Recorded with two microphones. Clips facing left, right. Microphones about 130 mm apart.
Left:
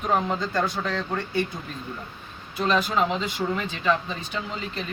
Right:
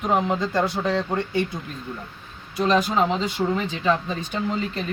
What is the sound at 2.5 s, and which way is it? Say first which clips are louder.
Speech: right 3 dB; 35° right (ahead or behind).